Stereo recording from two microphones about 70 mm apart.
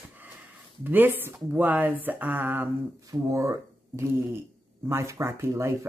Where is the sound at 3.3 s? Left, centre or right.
Right.